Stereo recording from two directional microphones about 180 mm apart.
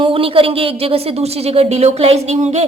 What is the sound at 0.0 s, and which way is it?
A woman's voice, 30° right (ahead or behind).